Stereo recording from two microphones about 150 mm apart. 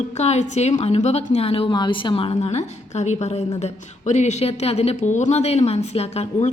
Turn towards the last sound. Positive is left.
turn(degrees=45)  # may be behind; listen again after turning